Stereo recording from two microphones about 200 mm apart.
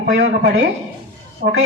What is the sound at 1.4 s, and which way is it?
Speech, 45° right (ahead or behind).